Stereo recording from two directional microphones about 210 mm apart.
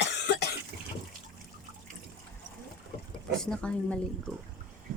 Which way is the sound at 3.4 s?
5° left (ahead or behind).